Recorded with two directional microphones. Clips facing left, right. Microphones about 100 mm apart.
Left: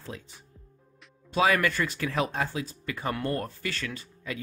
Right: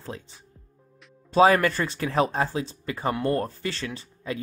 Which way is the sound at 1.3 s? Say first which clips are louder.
Right 6 dB; 35° right (ahead or behind).